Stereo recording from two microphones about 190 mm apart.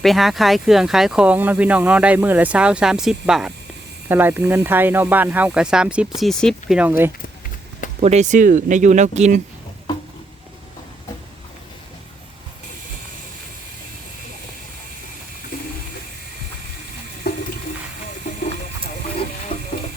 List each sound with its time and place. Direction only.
0.0 s speech: centre (ahead or behind)
8.0 s speech: 35° right (ahead or behind)
15.5 s toilet flush: 50° left (ahead or behind)
17.2 s toilet flush: 55° left (ahead or behind)
19.5 s a sound: 35° left (ahead or behind)